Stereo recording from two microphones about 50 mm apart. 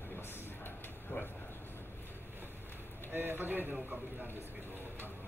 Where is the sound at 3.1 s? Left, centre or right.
Right.